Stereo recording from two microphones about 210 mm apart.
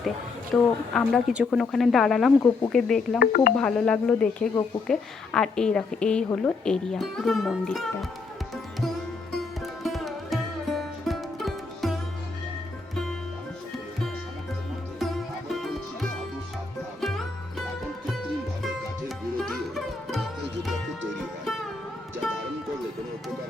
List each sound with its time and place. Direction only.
0.5 s a woman's voice: 5° left (ahead or behind)
3.2 s speech: 40° left (ahead or behind)
3.6 s a woman's voice: 5° left (ahead or behind)
9.8 s music: centre (ahead or behind)
14.9 s music: centre (ahead or behind)
18.6 s sitar: centre (ahead or behind)